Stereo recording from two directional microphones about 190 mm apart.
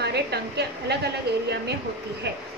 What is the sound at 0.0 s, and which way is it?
A woman's voice, 60° right (ahead or behind).